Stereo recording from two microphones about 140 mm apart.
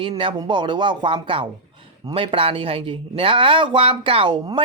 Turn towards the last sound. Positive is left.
turn(degrees=-35)  # may be behind; listen again after turning